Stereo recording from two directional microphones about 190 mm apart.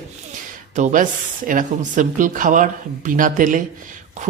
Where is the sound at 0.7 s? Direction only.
40° right (ahead or behind).